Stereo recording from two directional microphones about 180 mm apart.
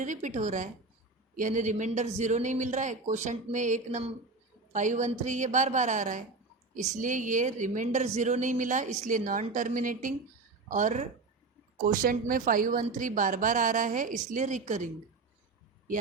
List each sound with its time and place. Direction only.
0.0 s a woman's voice: 45° right (ahead or behind)